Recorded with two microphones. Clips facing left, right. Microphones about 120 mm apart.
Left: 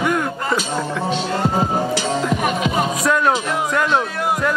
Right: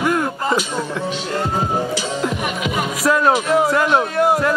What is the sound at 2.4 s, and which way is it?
Music, 30° left (ahead or behind).